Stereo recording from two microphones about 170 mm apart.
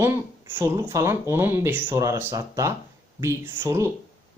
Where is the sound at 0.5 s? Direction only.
20° right (ahead or behind).